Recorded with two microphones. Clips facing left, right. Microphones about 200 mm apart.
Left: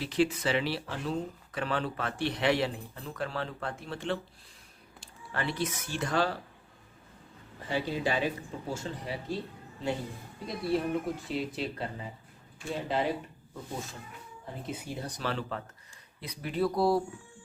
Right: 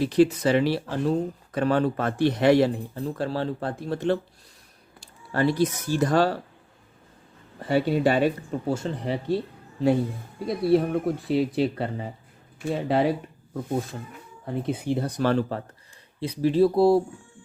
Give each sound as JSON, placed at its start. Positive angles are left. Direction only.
{"t": 0.0, "sound": "speech", "side_deg": -40}
{"t": 5.3, "sound": "speech", "side_deg": -40}
{"t": 7.7, "sound": "speech", "side_deg": -70}
{"t": 10.7, "sound": "speech", "side_deg": -65}
{"t": 16.2, "sound": "speech", "side_deg": -30}